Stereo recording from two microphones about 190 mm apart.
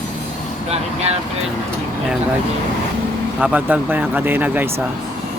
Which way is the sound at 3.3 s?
5° right (ahead or behind).